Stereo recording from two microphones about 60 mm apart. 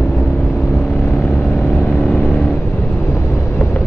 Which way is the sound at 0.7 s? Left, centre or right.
Left.